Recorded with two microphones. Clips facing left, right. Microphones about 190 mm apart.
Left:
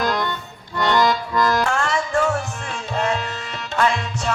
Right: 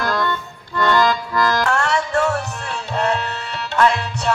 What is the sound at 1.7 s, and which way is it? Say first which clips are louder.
Music: right 2 dB; 65° right (ahead or behind).